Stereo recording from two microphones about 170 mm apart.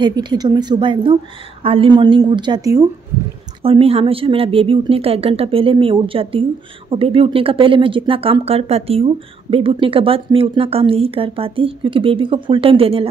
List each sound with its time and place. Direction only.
0.0 s a woman's voice: 25° right (ahead or behind)
3.6 s speech: 35° right (ahead or behind)